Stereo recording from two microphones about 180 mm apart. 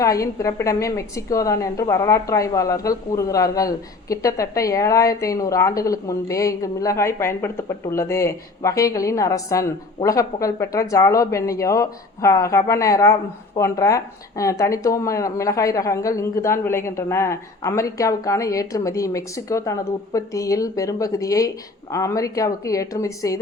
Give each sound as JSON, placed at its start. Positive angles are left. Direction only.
{"t": 0.0, "sound": "a woman's voice", "side_deg": 20}